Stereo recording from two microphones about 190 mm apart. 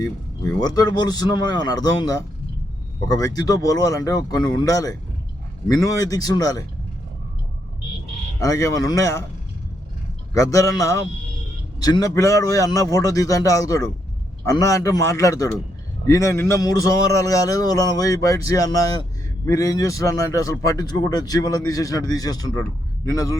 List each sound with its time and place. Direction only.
0.6 s a man's voice: 20° left (ahead or behind)
8.4 s a man's voice: 15° left (ahead or behind)
10.3 s a man's voice: 15° left (ahead or behind)